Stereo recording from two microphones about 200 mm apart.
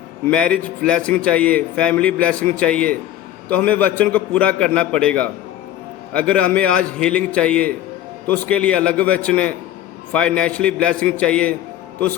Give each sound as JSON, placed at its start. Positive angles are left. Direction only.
{"t": 0.3, "sound": "a man's voice", "side_deg": 5}